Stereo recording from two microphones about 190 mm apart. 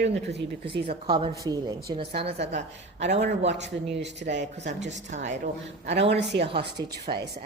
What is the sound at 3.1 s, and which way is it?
A man's voice, 65° right (ahead or behind).